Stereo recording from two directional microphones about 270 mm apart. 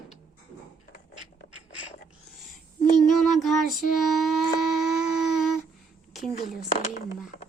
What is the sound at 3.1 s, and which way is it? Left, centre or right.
Child singing, centre.